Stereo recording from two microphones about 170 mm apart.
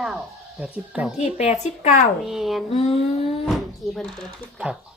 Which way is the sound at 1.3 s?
40° left (ahead or behind).